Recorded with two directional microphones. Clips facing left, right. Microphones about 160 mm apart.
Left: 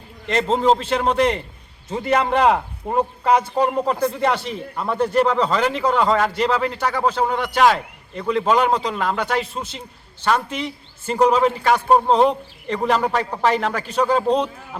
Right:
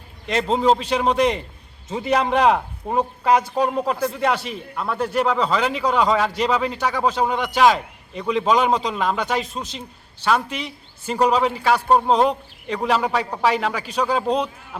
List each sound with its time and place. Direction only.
0.3 s a man's voice: 10° right (ahead or behind)
1.9 s a man's voice: centre (ahead or behind)